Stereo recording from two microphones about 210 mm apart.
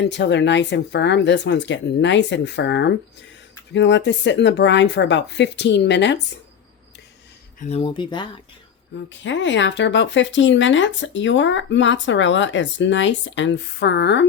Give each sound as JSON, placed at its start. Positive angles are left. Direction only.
{"t": 0.0, "sound": "speech", "side_deg": 55}
{"t": 7.6, "sound": "speech", "side_deg": 25}
{"t": 9.2, "sound": "speech", "side_deg": 60}